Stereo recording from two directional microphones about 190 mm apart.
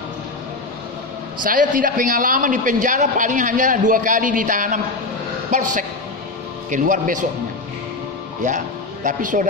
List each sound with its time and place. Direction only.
1.4 s a man's voice: 45° right (ahead or behind)
8.4 s speech: 40° right (ahead or behind)